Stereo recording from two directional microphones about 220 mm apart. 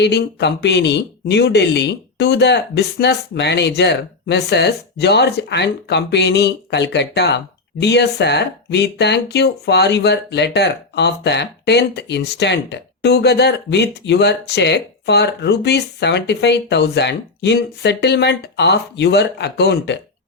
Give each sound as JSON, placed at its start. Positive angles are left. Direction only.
{"t": 0.0, "sound": "speech", "side_deg": 50}